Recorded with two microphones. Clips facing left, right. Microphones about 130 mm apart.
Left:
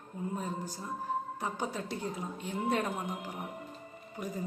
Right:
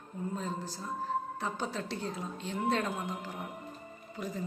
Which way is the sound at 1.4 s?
15° left (ahead or behind).